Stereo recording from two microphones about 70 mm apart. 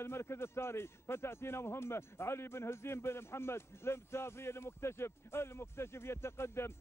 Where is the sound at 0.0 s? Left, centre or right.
Left.